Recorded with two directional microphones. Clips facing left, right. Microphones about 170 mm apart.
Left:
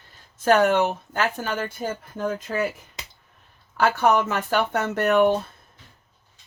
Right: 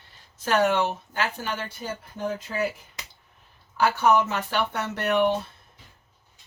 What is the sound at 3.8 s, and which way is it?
Speech, 50° left (ahead or behind).